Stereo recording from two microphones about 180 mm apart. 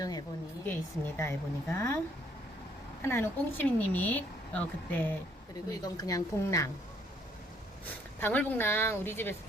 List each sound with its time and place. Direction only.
0.0 s a woman's voice: 20° left (ahead or behind)
3.0 s speech: 15° left (ahead or behind)
5.8 s a woman's voice: 20° left (ahead or behind)
8.2 s speech: 10° left (ahead or behind)